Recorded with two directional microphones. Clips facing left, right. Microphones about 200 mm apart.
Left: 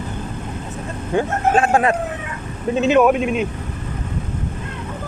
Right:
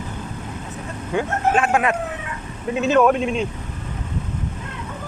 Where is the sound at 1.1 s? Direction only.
35° left (ahead or behind).